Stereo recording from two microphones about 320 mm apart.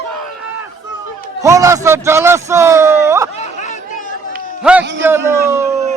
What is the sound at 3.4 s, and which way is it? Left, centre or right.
Chatter, left.